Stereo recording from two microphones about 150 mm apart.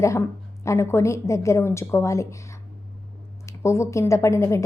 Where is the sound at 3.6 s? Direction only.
20° left (ahead or behind).